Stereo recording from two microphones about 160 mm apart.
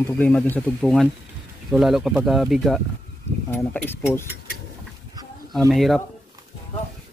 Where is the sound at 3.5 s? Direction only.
10° left (ahead or behind).